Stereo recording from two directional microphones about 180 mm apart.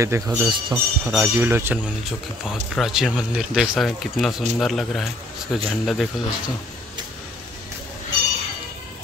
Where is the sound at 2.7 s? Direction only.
Centre (ahead or behind).